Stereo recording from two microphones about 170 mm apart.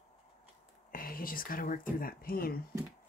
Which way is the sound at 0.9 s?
55° left (ahead or behind).